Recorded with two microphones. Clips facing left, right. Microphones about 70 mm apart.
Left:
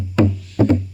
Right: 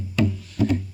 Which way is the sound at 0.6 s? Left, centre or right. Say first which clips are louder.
Left 7 dB; left.